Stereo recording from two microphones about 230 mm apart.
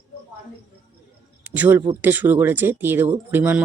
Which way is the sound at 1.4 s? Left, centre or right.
Centre.